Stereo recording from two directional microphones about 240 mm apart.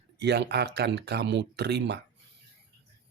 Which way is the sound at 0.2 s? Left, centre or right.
Right.